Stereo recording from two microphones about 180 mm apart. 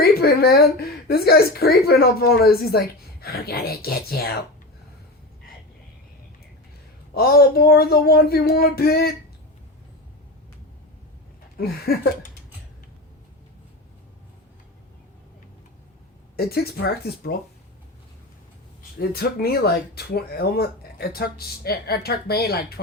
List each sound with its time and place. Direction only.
0.0 s a woman's voice: 60° left (ahead or behind)
7.1 s a woman's voice: 60° left (ahead or behind)
11.6 s a woman's voice: 55° left (ahead or behind)
16.4 s a woman's voice: 60° left (ahead or behind)
18.9 s a woman's voice: 60° left (ahead or behind)